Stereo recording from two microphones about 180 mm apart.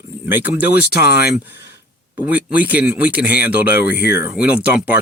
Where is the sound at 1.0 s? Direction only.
60° left (ahead or behind).